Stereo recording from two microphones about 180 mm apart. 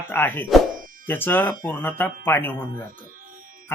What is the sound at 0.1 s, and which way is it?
Speech, 10° left (ahead or behind).